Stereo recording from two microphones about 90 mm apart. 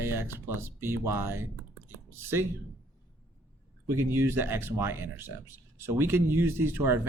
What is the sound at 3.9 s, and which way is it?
Speech, 30° right (ahead or behind).